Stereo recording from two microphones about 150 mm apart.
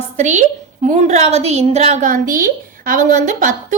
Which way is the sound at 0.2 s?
55° right (ahead or behind).